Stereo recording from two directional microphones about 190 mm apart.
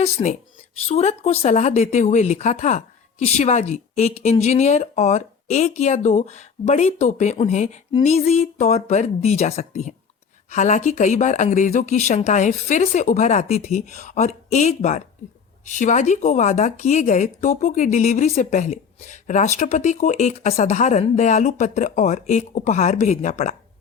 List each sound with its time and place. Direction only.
0.0 s speech: 40° left (ahead or behind)